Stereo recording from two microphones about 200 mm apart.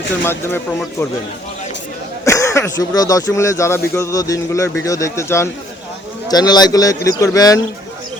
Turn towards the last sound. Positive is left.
turn(degrees=15)  # may be behind; listen again after turning